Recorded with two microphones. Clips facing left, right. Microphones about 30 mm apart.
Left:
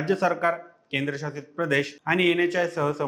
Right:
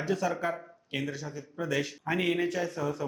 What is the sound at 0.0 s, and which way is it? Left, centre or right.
A man's voice, left.